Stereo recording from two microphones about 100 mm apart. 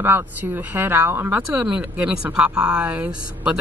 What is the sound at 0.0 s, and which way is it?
Speech, 20° right (ahead or behind).